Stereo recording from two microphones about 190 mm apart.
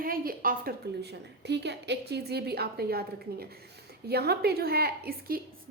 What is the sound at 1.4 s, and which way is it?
A woman's voice, 65° right (ahead or behind).